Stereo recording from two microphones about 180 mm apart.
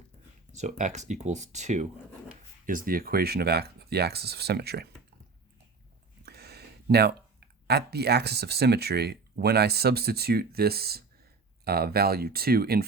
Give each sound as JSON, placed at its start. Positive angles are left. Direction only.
{"t": 0.5, "sound": "speech", "side_deg": -40}
{"t": 6.2, "sound": "speech", "side_deg": -60}